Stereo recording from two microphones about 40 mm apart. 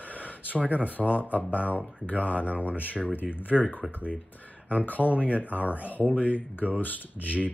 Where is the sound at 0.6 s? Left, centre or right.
Right.